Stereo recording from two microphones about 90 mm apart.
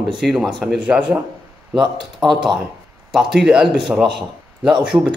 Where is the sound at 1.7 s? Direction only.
Centre (ahead or behind).